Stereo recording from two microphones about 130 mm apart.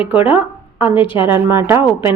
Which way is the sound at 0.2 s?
45° left (ahead or behind).